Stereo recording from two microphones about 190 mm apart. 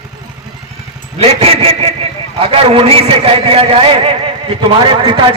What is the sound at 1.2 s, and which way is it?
A man's voice, 30° right (ahead or behind).